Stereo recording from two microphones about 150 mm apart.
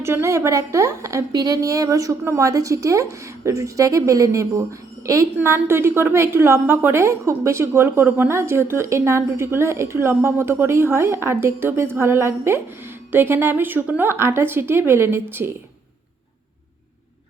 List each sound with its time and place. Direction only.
0.0 s a woman's voice: 15° right (ahead or behind)